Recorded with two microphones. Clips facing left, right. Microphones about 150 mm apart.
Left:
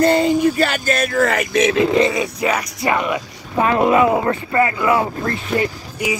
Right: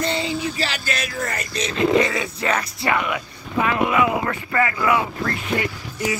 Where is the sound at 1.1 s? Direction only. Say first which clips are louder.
Left 10 dB; 90° left.